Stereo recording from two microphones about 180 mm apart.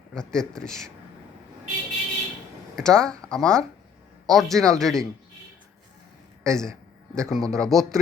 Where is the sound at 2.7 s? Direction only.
5° left (ahead or behind).